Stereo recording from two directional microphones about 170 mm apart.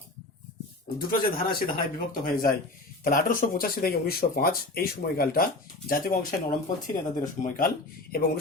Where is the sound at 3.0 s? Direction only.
55° left (ahead or behind).